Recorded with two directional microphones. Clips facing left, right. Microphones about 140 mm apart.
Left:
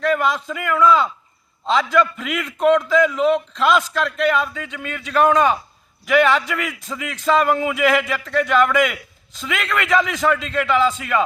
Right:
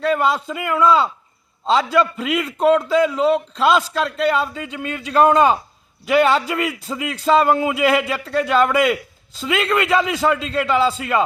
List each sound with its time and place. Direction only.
0.0 s a man's voice: 30° right (ahead or behind)